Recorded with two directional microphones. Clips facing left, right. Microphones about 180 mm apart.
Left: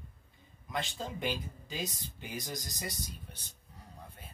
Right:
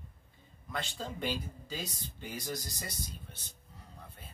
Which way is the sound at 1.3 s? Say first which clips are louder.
Right 1 dB; 20° left (ahead or behind).